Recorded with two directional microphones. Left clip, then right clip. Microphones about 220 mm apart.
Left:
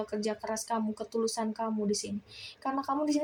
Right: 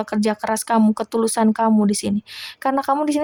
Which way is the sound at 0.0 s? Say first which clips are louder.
Right 12 dB; 45° right (ahead or behind).